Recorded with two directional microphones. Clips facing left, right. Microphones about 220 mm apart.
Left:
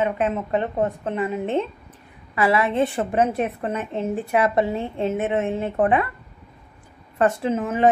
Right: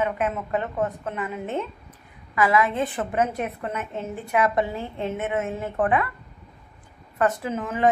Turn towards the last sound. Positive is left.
turn(degrees=25)  # may be behind; listen again after turning